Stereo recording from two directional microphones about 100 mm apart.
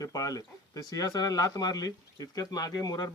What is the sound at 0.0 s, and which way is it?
Speech, 40° left (ahead or behind).